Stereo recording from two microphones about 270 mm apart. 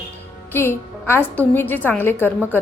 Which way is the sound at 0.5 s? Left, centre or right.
Centre.